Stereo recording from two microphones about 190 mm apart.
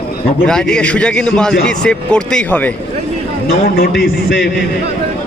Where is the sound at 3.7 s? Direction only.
50° left (ahead or behind).